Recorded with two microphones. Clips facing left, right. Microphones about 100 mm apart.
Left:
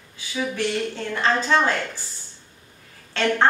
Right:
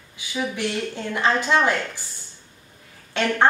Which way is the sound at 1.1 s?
15° right (ahead or behind).